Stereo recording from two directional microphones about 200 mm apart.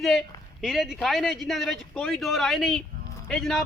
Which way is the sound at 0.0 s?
Centre (ahead or behind).